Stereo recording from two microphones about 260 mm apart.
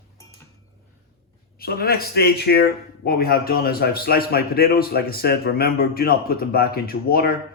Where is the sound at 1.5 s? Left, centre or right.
Left.